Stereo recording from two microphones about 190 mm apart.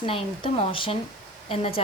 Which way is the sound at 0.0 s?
25° left (ahead or behind).